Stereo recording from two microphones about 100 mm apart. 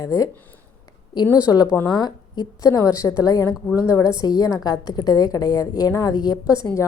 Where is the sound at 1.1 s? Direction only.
50° left (ahead or behind).